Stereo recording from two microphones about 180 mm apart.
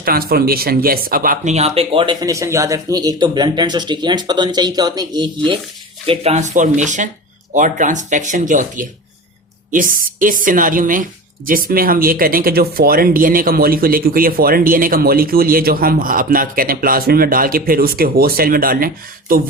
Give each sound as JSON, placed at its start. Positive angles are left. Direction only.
{"t": 0.0, "sound": "speech", "side_deg": -55}
{"t": 2.2, "sound": "speech", "side_deg": -20}
{"t": 6.1, "sound": "speech", "side_deg": -35}